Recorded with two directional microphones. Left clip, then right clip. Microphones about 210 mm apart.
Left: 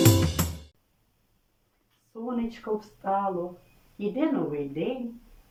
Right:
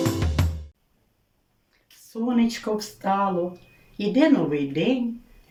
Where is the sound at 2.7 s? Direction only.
20° right (ahead or behind).